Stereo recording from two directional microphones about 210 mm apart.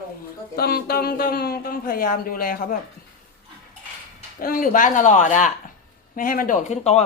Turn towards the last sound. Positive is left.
turn(degrees=30)  # may be behind; listen again after turning